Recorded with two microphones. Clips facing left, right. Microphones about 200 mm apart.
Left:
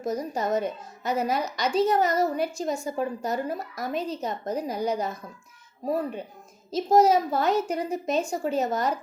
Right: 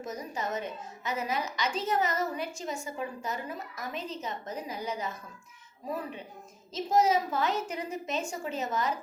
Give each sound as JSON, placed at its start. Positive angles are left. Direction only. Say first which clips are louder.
{"t": 0.0, "sound": "a woman's voice", "louder": "left 8 dB", "side_deg": 35}